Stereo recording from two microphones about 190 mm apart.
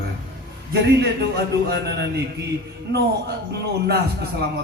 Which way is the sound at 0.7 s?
60° right (ahead or behind).